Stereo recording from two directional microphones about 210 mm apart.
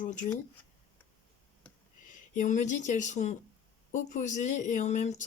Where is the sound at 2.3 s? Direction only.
35° left (ahead or behind).